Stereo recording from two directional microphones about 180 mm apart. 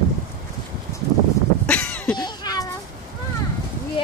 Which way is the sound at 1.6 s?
5° left (ahead or behind).